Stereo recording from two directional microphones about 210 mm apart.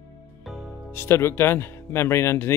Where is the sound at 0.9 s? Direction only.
10° left (ahead or behind).